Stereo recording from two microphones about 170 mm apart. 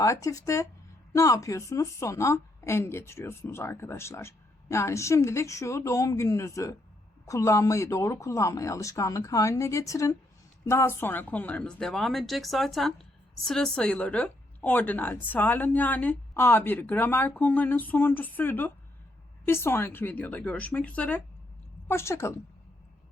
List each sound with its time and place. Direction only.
0.0 s a woman's voice: 20° left (ahead or behind)